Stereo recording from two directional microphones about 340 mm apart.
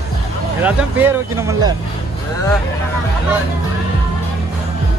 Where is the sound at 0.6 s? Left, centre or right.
Centre.